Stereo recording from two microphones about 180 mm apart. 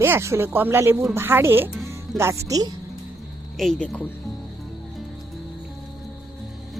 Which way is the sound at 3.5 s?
Centre (ahead or behind).